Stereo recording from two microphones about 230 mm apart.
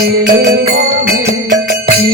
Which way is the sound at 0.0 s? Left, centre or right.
Right.